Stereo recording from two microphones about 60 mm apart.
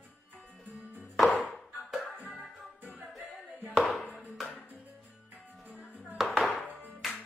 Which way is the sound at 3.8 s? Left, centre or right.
Centre.